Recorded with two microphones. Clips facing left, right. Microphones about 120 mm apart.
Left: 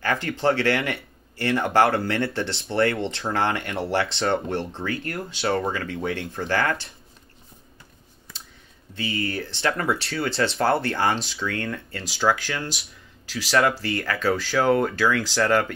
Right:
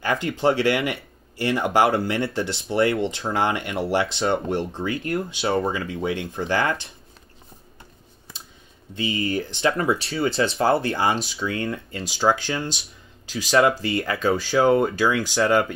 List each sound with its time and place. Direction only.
0.0 s speech: 15° right (ahead or behind)
8.9 s speech: 15° right (ahead or behind)